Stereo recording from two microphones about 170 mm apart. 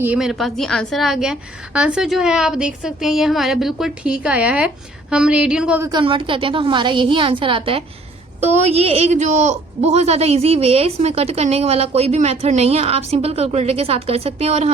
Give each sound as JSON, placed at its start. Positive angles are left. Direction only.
{"t": 0.0, "sound": "a woman's voice", "side_deg": -5}
{"t": 5.8, "sound": "a woman's voice", "side_deg": -25}